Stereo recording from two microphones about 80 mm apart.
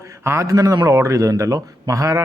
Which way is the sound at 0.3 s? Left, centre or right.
Right.